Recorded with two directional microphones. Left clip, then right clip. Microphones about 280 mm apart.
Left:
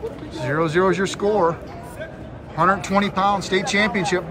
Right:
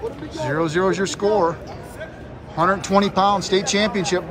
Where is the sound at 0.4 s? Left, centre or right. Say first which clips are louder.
Left 1 dB; centre.